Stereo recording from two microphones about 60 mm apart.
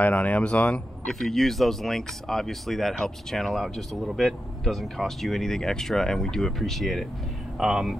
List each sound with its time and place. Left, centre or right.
0.0 s speech: left
1.0 s speech: centre